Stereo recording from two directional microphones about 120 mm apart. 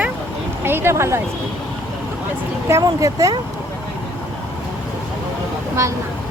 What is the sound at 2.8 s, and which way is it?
Speech, 30° right (ahead or behind).